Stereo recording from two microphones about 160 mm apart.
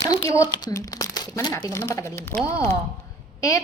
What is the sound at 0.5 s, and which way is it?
Speech, 25° left (ahead or behind).